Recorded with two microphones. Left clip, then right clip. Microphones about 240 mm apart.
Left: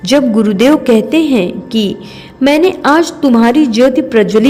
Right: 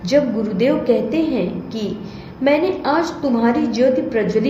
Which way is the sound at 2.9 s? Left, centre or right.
Left.